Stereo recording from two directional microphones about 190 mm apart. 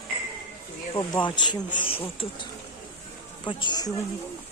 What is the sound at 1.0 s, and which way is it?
Speech, 25° left (ahead or behind).